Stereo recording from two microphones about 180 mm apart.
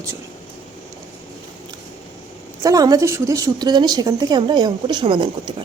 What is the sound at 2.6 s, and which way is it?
A woman's voice, 20° right (ahead or behind).